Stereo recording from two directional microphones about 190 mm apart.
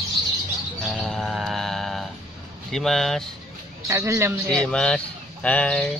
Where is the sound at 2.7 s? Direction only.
Centre (ahead or behind).